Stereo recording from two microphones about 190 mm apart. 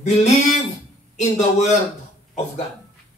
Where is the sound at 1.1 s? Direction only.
35° left (ahead or behind).